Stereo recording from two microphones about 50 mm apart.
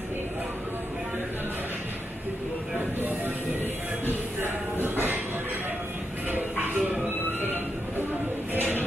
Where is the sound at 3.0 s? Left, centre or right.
Right.